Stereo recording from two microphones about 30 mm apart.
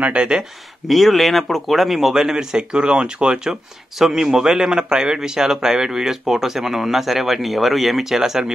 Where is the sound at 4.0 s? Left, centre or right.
Centre.